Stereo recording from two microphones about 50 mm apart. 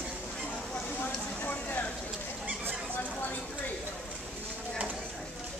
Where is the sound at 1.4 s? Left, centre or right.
Left.